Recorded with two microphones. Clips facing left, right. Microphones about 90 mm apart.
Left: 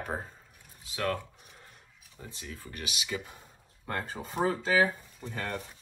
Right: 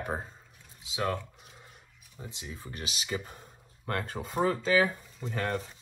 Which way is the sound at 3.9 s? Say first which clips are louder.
Right 2 dB; 65° right (ahead or behind).